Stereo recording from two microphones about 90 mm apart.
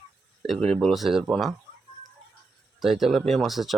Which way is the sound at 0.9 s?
Centre (ahead or behind).